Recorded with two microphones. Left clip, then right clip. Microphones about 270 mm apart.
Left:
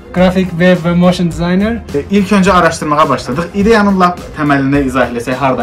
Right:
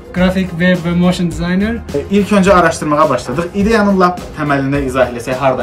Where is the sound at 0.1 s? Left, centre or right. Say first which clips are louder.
Left 4 dB; centre.